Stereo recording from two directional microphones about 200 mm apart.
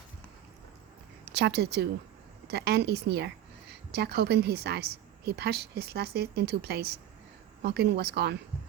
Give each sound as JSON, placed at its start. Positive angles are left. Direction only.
{"t": 1.2, "sound": "a woman's voice", "side_deg": -60}